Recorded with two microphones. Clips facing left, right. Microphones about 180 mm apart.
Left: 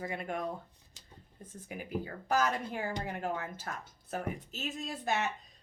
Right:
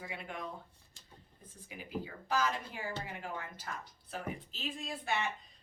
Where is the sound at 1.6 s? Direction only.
50° left (ahead or behind).